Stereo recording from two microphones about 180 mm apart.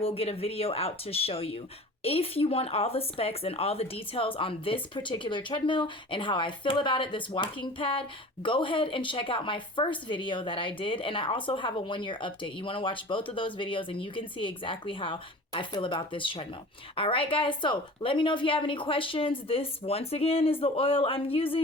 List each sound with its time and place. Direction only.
0.0 s a woman's voice: 30° left (ahead or behind)